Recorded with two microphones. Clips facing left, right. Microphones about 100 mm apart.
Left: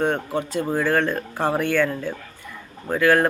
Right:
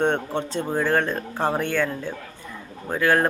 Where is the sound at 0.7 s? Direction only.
20° right (ahead or behind).